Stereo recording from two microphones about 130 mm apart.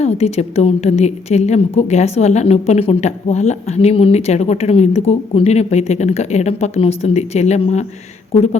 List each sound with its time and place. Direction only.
0.0 s a woman's voice: 55° left (ahead or behind)